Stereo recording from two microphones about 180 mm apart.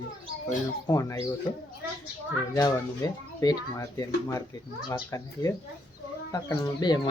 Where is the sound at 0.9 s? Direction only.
20° left (ahead or behind).